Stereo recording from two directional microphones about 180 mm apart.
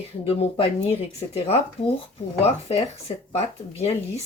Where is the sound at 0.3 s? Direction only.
35° left (ahead or behind).